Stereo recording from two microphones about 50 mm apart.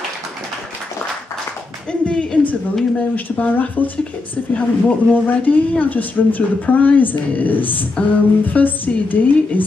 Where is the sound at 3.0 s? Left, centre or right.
Left.